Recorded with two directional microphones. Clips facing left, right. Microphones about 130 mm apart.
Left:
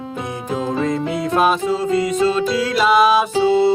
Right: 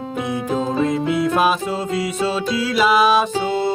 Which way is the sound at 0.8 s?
5° right (ahead or behind).